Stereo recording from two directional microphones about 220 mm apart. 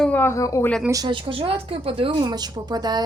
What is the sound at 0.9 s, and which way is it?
Speech, 20° right (ahead or behind).